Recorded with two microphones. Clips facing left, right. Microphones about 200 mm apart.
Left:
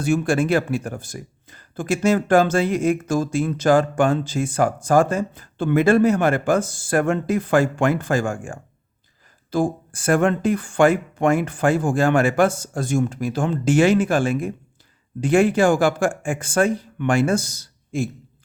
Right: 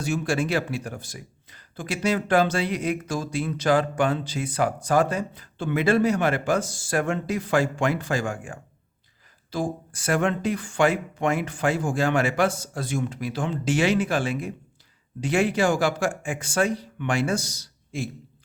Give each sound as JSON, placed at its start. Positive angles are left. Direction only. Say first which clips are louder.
{"t": 0.0, "sound": "speech", "louder": "left 6 dB", "side_deg": 55}